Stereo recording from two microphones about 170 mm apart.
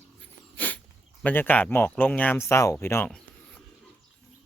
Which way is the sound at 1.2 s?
10° left (ahead or behind).